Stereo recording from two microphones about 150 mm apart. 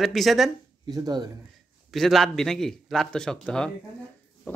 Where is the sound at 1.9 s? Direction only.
Centre (ahead or behind).